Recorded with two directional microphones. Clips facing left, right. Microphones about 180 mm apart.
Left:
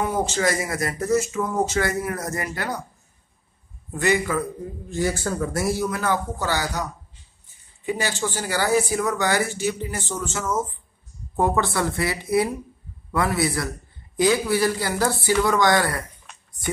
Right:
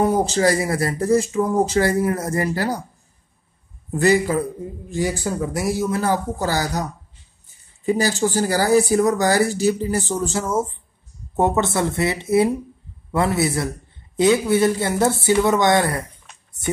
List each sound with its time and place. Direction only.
0.0 s speech: 35° right (ahead or behind)
3.9 s speech: 35° right (ahead or behind)
4.8 s a man's voice: 15° right (ahead or behind)
5.9 s speech: 35° right (ahead or behind)